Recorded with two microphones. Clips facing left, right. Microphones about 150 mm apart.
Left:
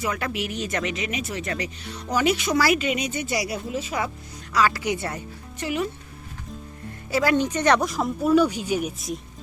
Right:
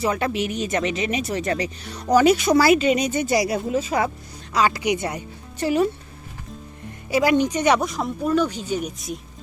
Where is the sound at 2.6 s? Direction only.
30° right (ahead or behind); by 4.1 s 45° right (ahead or behind).